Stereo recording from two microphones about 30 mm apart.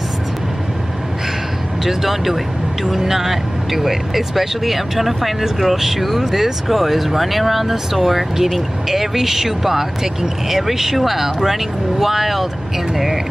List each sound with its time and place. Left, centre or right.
1.9 s speech: centre